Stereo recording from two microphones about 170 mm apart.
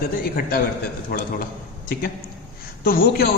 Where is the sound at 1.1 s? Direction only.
70° left (ahead or behind).